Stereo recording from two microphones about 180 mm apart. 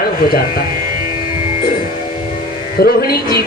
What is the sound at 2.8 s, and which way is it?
Speech, 60° left (ahead or behind).